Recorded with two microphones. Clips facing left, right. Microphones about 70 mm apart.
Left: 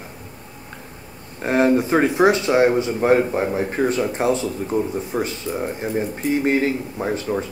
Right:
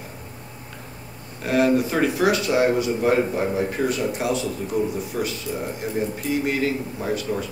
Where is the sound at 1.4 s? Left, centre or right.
Left.